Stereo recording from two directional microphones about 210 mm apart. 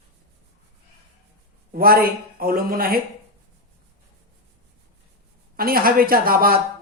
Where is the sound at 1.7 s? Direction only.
45° right (ahead or behind).